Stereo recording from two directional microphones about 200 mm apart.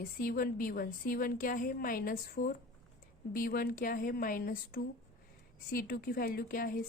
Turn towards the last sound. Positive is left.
turn(degrees=45)  # may be behind; listen again after turning